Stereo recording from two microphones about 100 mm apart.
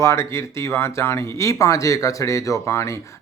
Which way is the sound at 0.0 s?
30° left (ahead or behind).